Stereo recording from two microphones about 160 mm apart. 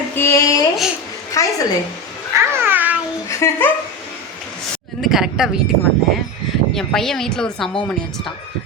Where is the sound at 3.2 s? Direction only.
15° left (ahead or behind).